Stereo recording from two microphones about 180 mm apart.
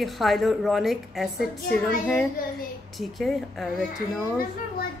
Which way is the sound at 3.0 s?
Centre (ahead or behind).